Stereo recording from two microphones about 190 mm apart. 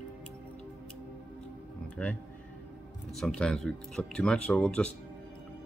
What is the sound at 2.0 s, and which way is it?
Speech, 5° left (ahead or behind).